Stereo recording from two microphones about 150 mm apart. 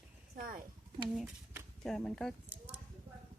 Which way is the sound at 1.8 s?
5° left (ahead or behind).